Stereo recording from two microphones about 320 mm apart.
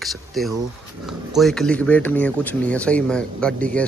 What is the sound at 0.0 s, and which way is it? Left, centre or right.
Speech, centre.